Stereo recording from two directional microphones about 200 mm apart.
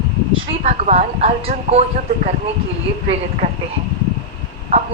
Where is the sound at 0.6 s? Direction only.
30° right (ahead or behind).